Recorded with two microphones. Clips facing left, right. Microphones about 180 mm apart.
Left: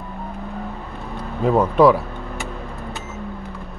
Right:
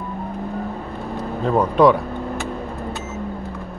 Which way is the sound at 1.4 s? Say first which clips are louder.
Left 1 dB; 5° left (ahead or behind).